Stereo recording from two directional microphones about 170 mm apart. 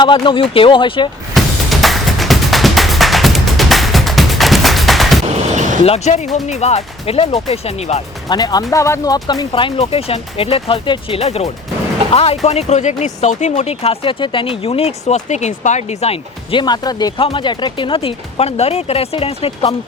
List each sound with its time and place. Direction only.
0.0 s speech: 30° left (ahead or behind)
1.4 s music: centre (ahead or behind)
5.5 s a sound: 45° right (ahead or behind)
5.8 s speech: 40° left (ahead or behind)
8.3 s speech: 25° left (ahead or behind)